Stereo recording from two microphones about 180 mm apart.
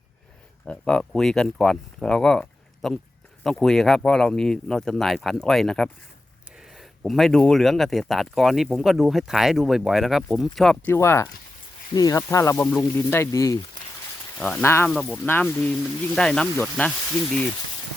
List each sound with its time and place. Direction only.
0.6 s speech: 5° left (ahead or behind)
10.9 s speech: 15° left (ahead or behind)
14.3 s speech: 5° left (ahead or behind)
14.8 s speech: 5° left (ahead or behind)